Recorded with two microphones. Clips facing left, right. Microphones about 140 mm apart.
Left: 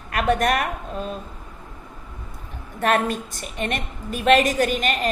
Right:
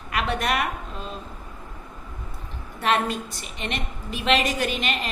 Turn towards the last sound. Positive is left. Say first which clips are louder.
# left 5 dB
turn(degrees=45)  # may be behind; listen again after turning